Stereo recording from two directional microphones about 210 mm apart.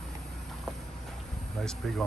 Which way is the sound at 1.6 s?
5° left (ahead or behind).